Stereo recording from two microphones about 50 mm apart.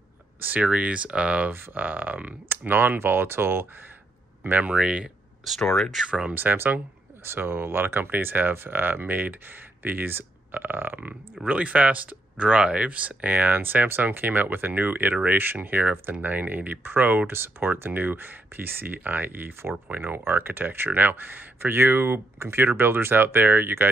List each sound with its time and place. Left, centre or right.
0.4 s speech: right
1.5 s speech: right
4.4 s speech: right
4.7 s speech: centre
5.6 s speech: centre
6.0 s speech: right
6.3 s speech: right
11.4 s speech: right